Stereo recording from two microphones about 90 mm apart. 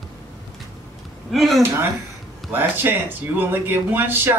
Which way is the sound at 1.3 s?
Centre (ahead or behind).